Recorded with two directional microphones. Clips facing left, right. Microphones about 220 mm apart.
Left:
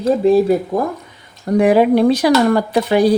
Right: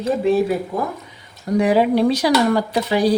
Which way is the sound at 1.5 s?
55° left (ahead or behind).